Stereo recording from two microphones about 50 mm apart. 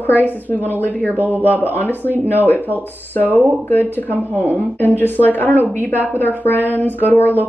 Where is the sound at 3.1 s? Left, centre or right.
Left.